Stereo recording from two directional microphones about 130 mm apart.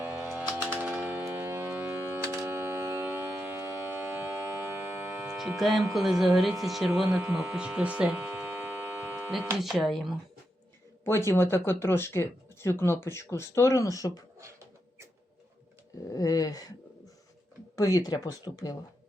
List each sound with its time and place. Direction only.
0.0 s typing: 15° right (ahead or behind)
0.8 s a sound: 10° right (ahead or behind)
5.5 s speech: centre (ahead or behind)
7.3 s hum: 10° right (ahead or behind)
9.6 s speech: centre (ahead or behind)
11.0 s speech: 20° left (ahead or behind)
16.1 s speech: 30° left (ahead or behind)
17.7 s speech: 25° left (ahead or behind)